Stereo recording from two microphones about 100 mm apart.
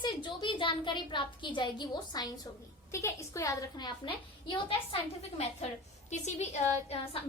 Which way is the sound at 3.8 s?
60° left (ahead or behind).